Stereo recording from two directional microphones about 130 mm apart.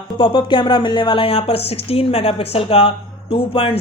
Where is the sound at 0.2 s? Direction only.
40° left (ahead or behind).